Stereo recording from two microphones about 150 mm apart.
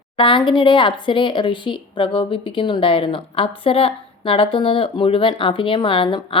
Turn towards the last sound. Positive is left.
turn(degrees=35)  # may be behind; listen again after turning